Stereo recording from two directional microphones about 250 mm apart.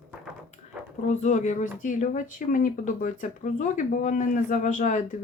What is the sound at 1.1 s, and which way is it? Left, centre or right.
Speech, left.